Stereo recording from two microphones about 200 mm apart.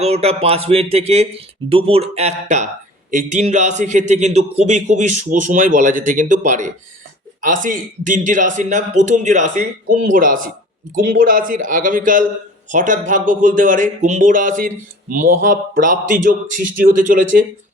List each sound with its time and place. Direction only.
0.0 s a man's voice: 30° right (ahead or behind)